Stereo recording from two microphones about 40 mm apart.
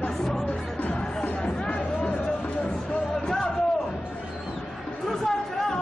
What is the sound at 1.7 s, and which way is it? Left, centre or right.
Music, left.